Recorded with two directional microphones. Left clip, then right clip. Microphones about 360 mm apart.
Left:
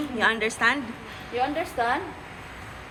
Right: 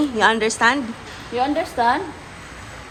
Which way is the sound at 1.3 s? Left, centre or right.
Right.